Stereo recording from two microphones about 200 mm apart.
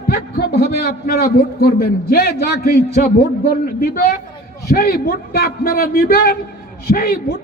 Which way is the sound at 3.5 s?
45° left (ahead or behind).